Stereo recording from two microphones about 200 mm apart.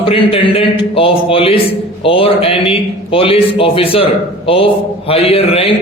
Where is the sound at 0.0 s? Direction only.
25° left (ahead or behind).